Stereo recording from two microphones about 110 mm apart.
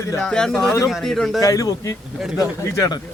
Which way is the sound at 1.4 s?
30° left (ahead or behind).